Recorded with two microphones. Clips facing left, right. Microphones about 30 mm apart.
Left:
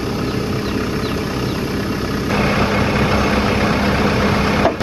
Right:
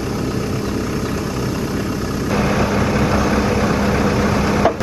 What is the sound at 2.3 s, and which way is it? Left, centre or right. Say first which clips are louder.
Vehicle: left 1 dB; left.